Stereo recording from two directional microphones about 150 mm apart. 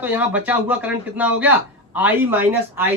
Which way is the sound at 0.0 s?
10° right (ahead or behind).